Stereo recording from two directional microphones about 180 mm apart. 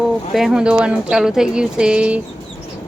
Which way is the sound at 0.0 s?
Centre (ahead or behind).